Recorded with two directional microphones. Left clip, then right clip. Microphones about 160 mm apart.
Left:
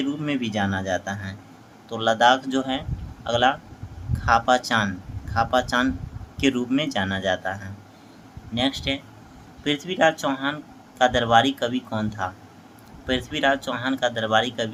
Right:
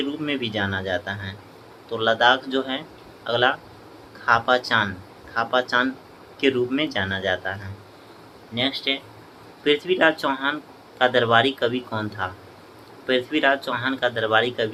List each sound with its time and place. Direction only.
0.0 s speech: 25° left (ahead or behind)